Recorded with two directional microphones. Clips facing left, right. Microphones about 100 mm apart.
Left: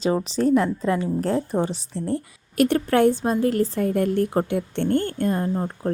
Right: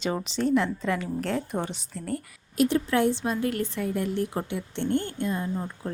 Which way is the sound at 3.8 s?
50° left (ahead or behind).